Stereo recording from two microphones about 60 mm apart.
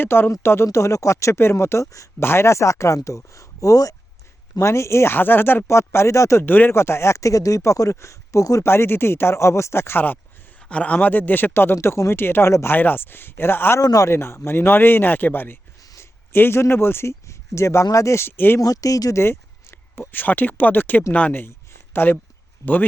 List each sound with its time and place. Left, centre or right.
0.0 s speech: left
0.4 s speech: left
4.5 s speech: left
5.1 s speech: left
5.6 s speech: left
6.4 s speech: left
6.7 s speech: left
8.6 s speech: left
10.6 s speech: centre; by 13.7 s left
13.7 s a man's voice: left
14.1 s speech: left
18.6 s speech: left
19.1 s speech: left
21.9 s speech: left